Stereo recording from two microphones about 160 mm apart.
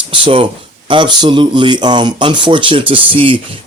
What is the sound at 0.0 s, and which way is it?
Speech, 35° right (ahead or behind).